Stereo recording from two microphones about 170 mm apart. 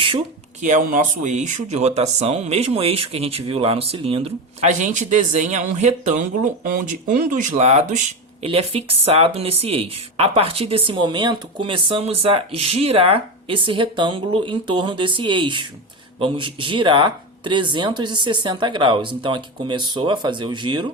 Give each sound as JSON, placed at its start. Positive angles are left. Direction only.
{"t": 0.6, "sound": "speech", "side_deg": -50}
{"t": 6.7, "sound": "speech", "side_deg": -55}
{"t": 8.4, "sound": "speech", "side_deg": -35}